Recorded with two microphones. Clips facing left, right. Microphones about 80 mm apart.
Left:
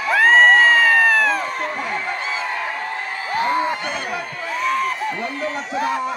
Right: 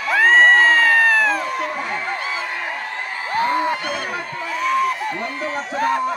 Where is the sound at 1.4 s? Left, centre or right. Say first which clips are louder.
Right 1 dB; left.